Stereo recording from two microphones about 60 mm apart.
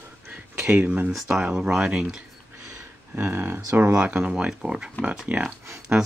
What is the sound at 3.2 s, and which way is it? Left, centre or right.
Speech, right.